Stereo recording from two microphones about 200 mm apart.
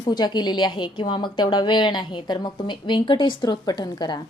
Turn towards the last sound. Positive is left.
turn(degrees=20)  # may be behind; listen again after turning